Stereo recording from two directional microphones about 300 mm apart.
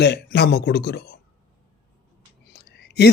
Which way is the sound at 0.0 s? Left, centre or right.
Left.